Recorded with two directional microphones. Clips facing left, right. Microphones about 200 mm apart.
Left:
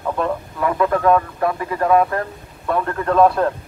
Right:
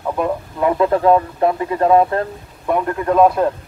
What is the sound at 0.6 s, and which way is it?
Speech, 25° right (ahead or behind).